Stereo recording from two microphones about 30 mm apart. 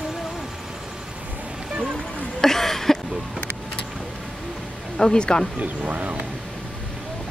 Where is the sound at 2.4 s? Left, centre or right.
Centre.